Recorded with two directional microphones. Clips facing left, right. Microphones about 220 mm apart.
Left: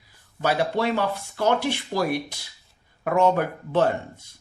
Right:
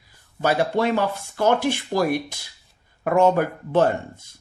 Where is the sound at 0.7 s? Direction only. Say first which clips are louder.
Right 3 dB; 45° right (ahead or behind).